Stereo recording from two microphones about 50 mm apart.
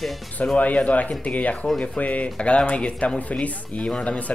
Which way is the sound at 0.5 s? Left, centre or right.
Left.